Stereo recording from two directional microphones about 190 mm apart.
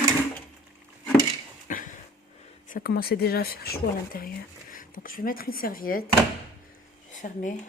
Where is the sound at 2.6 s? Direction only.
50° left (ahead or behind).